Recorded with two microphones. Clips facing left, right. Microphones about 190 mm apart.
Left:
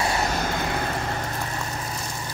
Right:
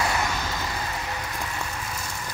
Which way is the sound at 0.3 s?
55° left (ahead or behind).